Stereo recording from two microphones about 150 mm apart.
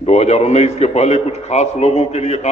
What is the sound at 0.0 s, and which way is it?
A man's voice, 45° left (ahead or behind).